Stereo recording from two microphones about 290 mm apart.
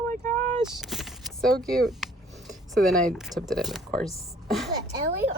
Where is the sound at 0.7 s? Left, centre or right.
Centre.